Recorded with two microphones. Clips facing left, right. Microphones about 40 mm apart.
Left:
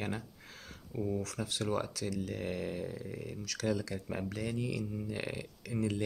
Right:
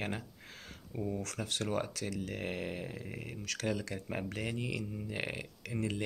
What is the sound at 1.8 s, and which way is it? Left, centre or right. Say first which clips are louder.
Speech: left 1 dB; right.